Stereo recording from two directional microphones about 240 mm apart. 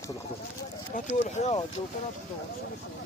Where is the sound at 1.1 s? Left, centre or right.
Left.